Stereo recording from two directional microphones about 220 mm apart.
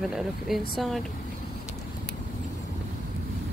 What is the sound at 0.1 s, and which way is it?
Speech, centre (ahead or behind).